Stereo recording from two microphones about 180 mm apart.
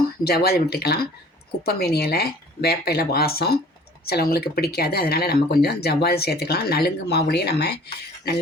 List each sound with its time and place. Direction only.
0.3 s speech: 60° left (ahead or behind)